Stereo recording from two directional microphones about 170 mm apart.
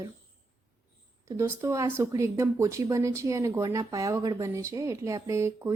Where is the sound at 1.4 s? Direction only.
15° right (ahead or behind).